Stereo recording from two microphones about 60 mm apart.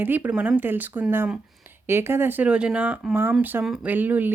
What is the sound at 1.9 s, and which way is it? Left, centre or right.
Speech, right.